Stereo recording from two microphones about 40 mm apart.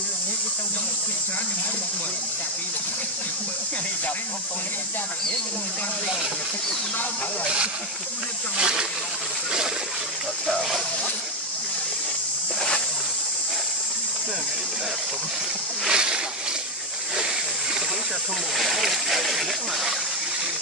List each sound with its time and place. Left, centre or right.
8.5 s speech: right
10.4 s speech: centre
15.9 s speech: centre
18.6 s speech: centre